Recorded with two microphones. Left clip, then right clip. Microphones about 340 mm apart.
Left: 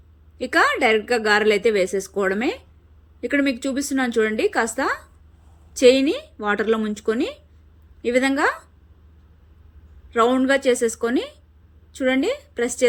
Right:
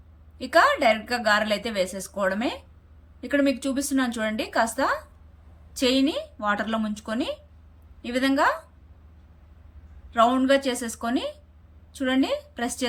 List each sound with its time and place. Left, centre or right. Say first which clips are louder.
0.3 s a woman's voice: left 1 dB; centre
10.1 s a woman's voice: left 2 dB; centre